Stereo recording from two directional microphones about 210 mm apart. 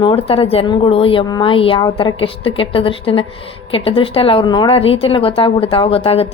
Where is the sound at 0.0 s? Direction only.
25° left (ahead or behind).